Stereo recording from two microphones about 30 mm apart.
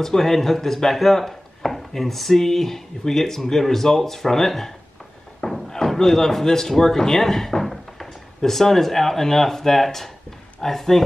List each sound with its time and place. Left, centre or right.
0.0 s speech: centre
5.4 s thunk: centre
5.9 s speech: centre
7.6 s a sound: centre
8.4 s speech: centre